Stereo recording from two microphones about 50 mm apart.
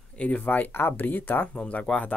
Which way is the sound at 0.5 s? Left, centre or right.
Left.